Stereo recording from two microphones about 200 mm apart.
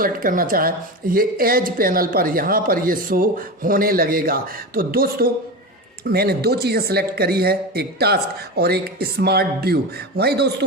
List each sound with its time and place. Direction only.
0.0 s speech: 45° right (ahead or behind)